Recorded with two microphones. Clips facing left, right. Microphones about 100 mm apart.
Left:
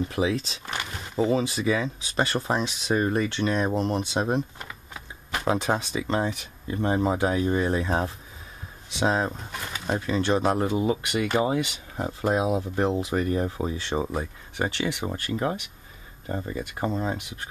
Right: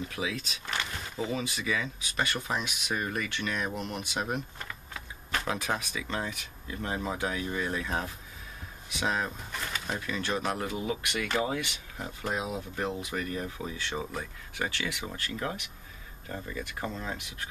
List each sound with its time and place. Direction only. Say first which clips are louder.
0.1 s speech: left 9 dB; 30° left (ahead or behind)
4.6 s typing: left 2 dB; 15° left (ahead or behind)
5.5 s speech: left 10 dB; 30° left (ahead or behind)
12.0 s speech: left 9 dB; 35° left (ahead or behind)